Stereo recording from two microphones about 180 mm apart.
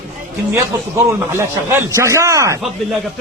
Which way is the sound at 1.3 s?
15° right (ahead or behind).